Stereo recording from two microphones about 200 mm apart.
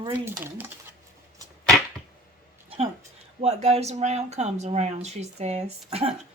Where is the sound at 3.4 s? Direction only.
35° right (ahead or behind).